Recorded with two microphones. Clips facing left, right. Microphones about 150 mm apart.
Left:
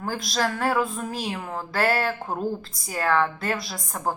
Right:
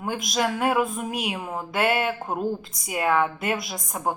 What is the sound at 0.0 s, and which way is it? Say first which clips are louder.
A woman's voice: right 1 dB; 20° right (ahead or behind).